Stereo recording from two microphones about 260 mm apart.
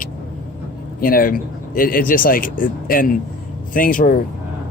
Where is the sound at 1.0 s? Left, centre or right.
Left.